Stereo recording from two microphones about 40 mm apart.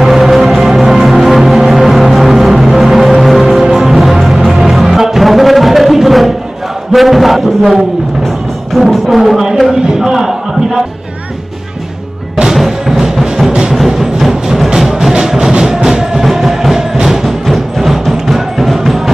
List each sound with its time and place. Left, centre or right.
0.0 s music: centre
6.9 s chant: centre
8.7 s a sound: centre
12.5 s music: centre
13.5 s music: right
13.7 s music: centre